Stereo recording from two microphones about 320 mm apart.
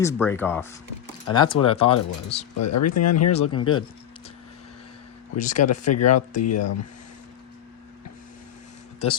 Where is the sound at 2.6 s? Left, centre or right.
Left.